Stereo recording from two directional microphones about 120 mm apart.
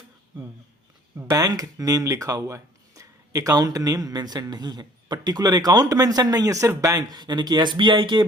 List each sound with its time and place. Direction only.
1.1 s speech: 25° right (ahead or behind); by 8.2 s 40° right (ahead or behind)